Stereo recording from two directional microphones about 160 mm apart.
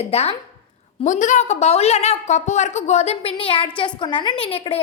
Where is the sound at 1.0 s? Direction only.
50° left (ahead or behind).